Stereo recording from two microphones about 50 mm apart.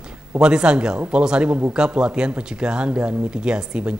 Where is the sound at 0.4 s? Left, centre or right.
Centre.